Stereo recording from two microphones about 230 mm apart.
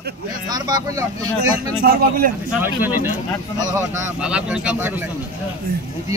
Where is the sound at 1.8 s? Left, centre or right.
Right.